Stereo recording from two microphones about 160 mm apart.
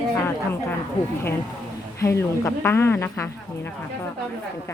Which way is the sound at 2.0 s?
15° left (ahead or behind).